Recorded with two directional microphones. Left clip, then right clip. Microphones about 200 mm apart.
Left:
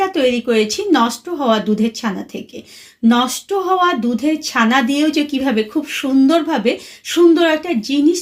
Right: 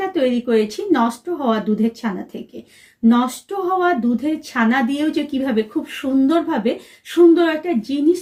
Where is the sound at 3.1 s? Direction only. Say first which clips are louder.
Left 3 dB; 35° left (ahead or behind).